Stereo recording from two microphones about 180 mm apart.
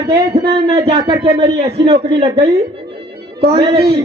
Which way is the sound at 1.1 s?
30° right (ahead or behind).